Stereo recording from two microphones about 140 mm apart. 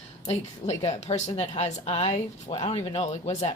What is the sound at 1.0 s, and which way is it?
Speech, 55° left (ahead or behind).